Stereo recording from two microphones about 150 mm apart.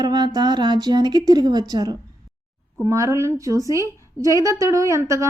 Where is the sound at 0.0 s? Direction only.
30° right (ahead or behind).